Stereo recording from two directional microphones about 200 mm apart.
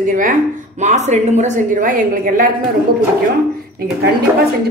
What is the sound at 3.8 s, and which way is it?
Speech, 50° right (ahead or behind).